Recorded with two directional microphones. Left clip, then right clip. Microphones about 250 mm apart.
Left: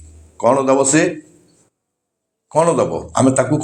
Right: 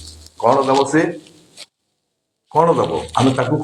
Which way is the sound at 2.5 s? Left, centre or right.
Left.